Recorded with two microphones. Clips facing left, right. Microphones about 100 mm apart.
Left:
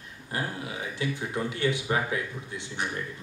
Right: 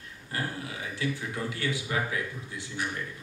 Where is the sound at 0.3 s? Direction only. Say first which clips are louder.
Left 2 dB; 20° left (ahead or behind).